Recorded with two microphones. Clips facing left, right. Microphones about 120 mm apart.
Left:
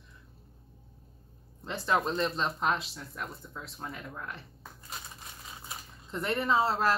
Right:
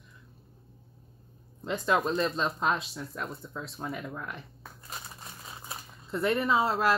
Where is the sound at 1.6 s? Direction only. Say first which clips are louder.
Right 2 dB; 15° right (ahead or behind).